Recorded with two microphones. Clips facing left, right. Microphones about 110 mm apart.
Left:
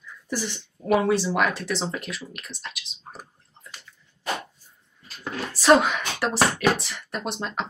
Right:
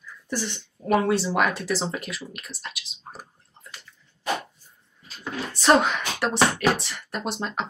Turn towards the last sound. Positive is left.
turn(degrees=0)  # may be behind; listen again after turning